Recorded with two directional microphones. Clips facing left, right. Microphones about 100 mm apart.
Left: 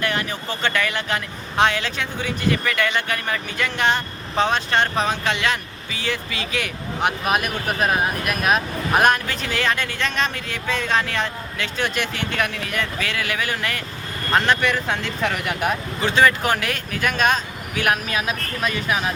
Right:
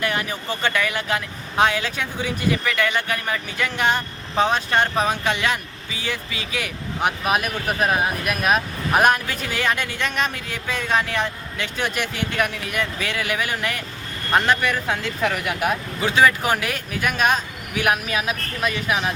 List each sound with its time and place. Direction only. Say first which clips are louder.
0.0 s speech: even; 10° right (ahead or behind)